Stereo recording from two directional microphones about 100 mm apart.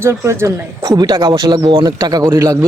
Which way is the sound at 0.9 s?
45° right (ahead or behind).